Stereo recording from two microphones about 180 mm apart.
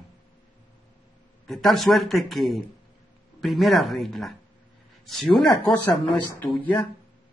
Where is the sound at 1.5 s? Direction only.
Centre (ahead or behind).